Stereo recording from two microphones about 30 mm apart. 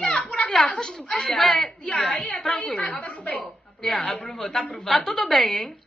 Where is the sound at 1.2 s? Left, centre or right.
Centre.